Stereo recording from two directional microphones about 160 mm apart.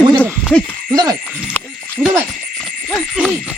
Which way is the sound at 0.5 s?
10° left (ahead or behind).